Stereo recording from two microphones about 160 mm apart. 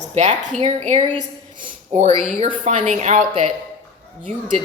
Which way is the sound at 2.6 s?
50° right (ahead or behind).